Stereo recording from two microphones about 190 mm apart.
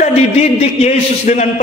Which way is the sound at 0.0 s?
35° left (ahead or behind).